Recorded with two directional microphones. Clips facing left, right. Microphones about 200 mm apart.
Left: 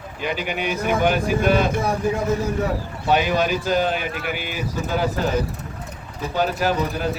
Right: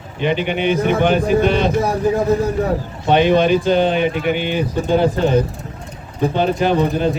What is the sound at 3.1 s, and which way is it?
Speech, 5° left (ahead or behind).